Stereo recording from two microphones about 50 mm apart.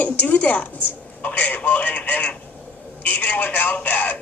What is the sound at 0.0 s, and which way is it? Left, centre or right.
A woman's voice, left.